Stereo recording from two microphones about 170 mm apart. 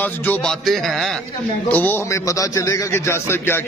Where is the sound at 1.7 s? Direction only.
10° left (ahead or behind).